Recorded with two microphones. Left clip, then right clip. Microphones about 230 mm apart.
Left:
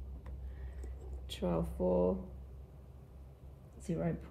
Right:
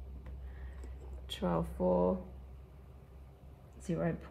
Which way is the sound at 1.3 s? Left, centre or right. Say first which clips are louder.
Right 1 dB; centre.